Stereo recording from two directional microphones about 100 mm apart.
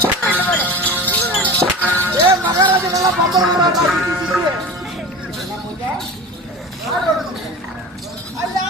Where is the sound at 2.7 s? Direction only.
35° right (ahead or behind).